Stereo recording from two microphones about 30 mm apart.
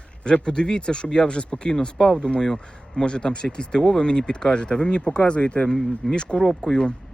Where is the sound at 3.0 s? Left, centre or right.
Left.